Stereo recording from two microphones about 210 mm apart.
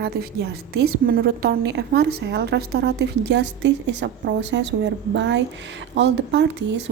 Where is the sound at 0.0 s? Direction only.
50° right (ahead or behind).